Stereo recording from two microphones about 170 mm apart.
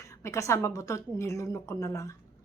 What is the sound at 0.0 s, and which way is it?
A woman's voice, 15° left (ahead or behind).